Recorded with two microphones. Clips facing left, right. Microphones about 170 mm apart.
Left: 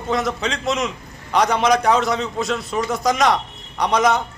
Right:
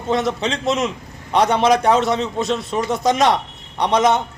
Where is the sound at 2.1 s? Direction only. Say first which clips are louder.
Right 2 dB; 25° right (ahead or behind).